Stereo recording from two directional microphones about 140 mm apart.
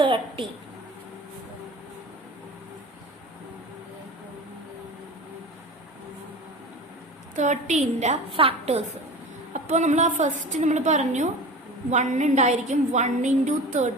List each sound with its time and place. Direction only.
0.0 s a woman's voice: 35° right (ahead or behind)
7.3 s a woman's voice: 60° right (ahead or behind)
8.3 s a woman's voice: 40° right (ahead or behind)
9.5 s a woman's voice: 60° right (ahead or behind)